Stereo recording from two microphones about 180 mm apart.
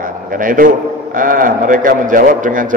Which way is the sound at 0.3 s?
50° right (ahead or behind).